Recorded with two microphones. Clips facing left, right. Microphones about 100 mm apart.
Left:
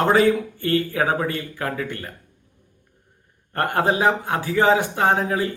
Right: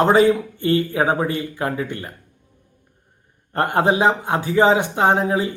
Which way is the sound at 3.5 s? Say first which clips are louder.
Right 3 dB; 20° right (ahead or behind).